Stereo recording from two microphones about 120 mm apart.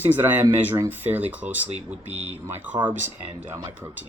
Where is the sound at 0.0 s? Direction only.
15° right (ahead or behind).